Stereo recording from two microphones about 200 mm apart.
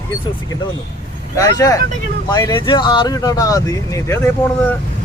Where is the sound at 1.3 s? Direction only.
15° left (ahead or behind).